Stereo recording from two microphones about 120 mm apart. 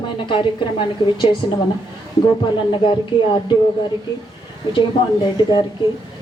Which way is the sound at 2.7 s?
40° left (ahead or behind).